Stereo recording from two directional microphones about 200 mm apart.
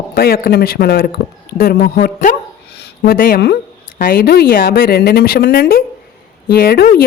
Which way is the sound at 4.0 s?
50° left (ahead or behind).